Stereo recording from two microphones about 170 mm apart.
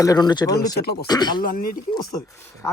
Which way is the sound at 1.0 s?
25° left (ahead or behind).